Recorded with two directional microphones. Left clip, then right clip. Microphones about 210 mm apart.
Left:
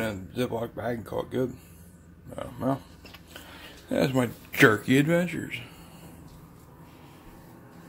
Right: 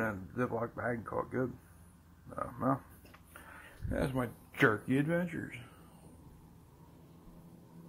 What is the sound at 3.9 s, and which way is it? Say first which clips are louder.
Speech: left 10 dB; 25° left (ahead or behind).